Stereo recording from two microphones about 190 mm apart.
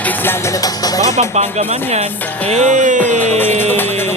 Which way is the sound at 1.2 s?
35° right (ahead or behind).